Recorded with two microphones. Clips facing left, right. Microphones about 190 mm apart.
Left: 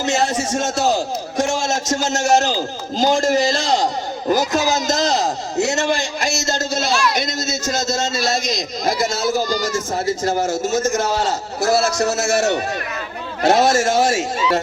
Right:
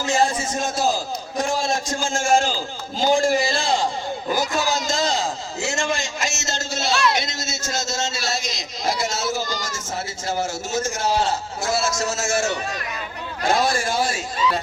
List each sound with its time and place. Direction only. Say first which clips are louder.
0.0 s a man's voice: left 2 dB; 70° left (ahead or behind)
2.9 s a man's voice: left 2 dB; 40° left (ahead or behind)
11.8 s a man's voice: left 5 dB; 65° left (ahead or behind)